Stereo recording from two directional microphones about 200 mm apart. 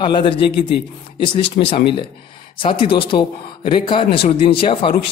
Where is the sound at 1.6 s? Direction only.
45° left (ahead or behind).